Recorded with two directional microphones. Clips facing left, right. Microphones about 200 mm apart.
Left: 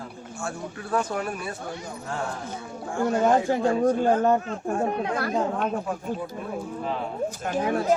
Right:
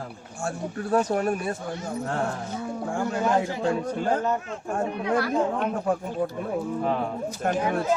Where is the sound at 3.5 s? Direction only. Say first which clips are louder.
Left 5 dB; 50° left (ahead or behind).